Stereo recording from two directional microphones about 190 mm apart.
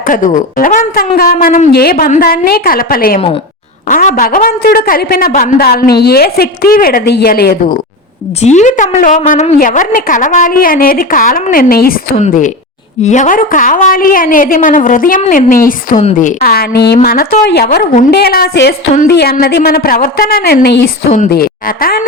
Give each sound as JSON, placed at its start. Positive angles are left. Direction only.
{"t": 0.0, "sound": "a woman's voice", "side_deg": 45}
{"t": 8.4, "sound": "a woman's voice", "side_deg": 40}
{"t": 12.1, "sound": "a woman's voice", "side_deg": 40}